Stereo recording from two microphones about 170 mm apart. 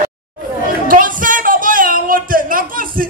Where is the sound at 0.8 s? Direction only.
50° right (ahead or behind).